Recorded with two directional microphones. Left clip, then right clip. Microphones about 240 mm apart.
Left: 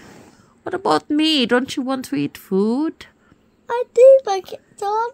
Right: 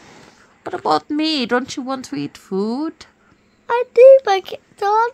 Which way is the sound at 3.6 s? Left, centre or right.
Centre.